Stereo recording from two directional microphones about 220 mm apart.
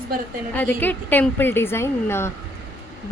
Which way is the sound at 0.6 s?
10° left (ahead or behind).